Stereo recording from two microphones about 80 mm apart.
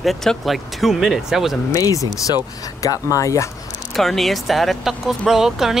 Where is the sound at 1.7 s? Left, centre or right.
Left.